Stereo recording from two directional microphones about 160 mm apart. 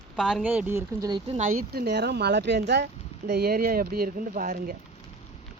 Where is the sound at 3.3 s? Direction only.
75° right (ahead or behind).